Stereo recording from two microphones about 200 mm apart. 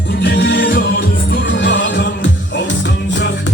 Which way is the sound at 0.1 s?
60° left (ahead or behind).